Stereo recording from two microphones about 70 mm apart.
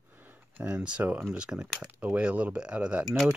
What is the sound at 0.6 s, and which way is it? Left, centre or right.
Speech, centre.